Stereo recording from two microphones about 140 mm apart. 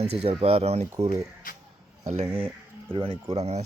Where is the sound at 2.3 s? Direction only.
40° right (ahead or behind).